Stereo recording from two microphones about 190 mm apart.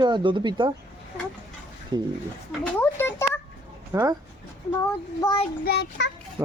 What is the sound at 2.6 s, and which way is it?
Speech, 10° left (ahead or behind).